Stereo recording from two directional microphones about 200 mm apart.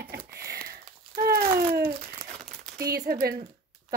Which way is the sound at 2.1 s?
35° right (ahead or behind).